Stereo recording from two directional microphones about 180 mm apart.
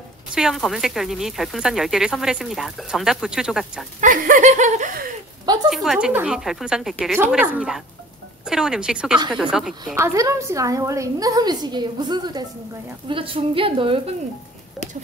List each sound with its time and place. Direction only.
0.3 s speech: centre (ahead or behind)
4.0 s snicker: 50° right (ahead or behind)
5.4 s a woman's voice: 20° right (ahead or behind)
5.7 s speech: centre (ahead or behind)
9.9 s a woman's voice: 15° right (ahead or behind)